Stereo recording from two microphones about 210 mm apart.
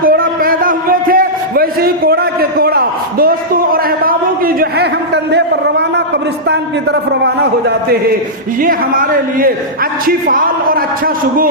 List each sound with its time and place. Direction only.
0.0 s a sound: 45° right (ahead or behind)
6.5 s a man's voice: 55° right (ahead or behind)
8.6 s speech: 40° right (ahead or behind)